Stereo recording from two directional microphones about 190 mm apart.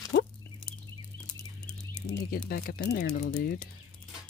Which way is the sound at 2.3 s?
50° left (ahead or behind).